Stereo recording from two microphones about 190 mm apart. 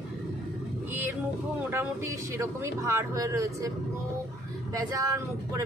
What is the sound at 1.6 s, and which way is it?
Speech, 15° right (ahead or behind).